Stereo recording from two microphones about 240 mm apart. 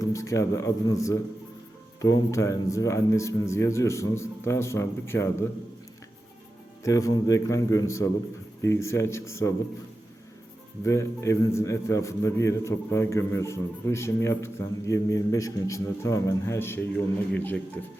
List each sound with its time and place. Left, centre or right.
0.0 s a man's voice: centre
6.8 s a man's voice: centre
10.8 s a man's voice: centre